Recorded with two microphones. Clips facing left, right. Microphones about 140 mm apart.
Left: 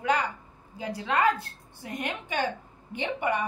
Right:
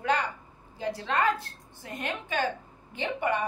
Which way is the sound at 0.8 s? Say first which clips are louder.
Left 1 dB; 10° left (ahead or behind).